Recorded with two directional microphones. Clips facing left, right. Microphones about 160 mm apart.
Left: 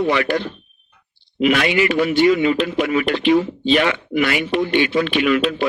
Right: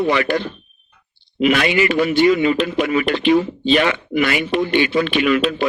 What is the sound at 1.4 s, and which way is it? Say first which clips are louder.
A man's voice: even; 40° right (ahead or behind).